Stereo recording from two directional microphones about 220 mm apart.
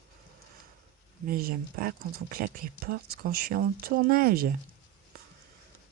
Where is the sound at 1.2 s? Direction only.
40° right (ahead or behind).